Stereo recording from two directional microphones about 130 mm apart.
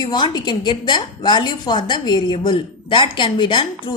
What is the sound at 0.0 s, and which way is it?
A woman's voice, 35° left (ahead or behind).